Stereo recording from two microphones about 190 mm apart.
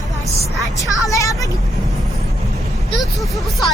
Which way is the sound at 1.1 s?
15° left (ahead or behind).